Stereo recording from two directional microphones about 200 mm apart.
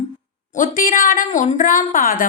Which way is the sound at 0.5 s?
40° left (ahead or behind).